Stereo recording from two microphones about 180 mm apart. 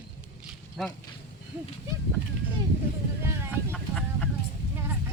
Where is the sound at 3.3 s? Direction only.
15° right (ahead or behind).